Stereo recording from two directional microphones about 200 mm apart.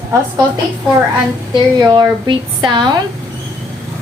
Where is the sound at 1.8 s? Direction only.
20° right (ahead or behind).